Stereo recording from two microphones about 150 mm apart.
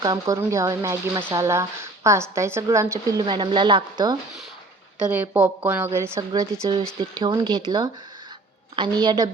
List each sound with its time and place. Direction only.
0.0 s a woman's voice: 25° right (ahead or behind)
4.9 s a woman's voice: 10° right (ahead or behind); by 9.3 s 30° right (ahead or behind)